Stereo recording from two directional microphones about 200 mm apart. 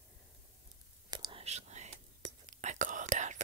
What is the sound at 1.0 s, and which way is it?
Whispering, 20° right (ahead or behind).